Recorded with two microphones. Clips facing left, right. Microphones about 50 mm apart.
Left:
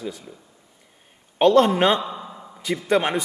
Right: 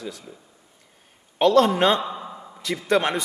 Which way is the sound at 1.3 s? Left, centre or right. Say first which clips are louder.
Left 1 dB; left.